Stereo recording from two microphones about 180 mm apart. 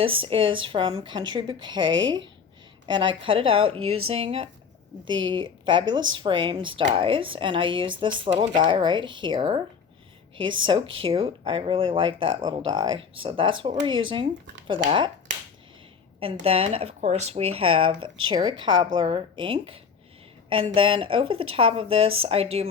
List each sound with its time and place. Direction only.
0.0 s speech: 30° right (ahead or behind)
10.7 s speech: 30° right (ahead or behind)
16.2 s speech: 30° right (ahead or behind)